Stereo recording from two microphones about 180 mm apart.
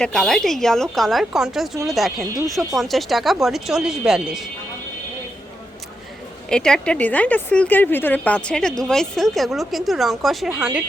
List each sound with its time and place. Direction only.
0.0 s a woman's voice: centre (ahead or behind)
6.5 s a woman's voice: 5° left (ahead or behind)